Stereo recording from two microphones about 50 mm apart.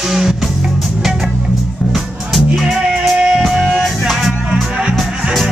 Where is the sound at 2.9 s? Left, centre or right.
Centre.